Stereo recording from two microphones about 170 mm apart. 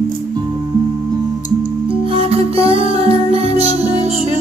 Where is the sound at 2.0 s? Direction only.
35° right (ahead or behind).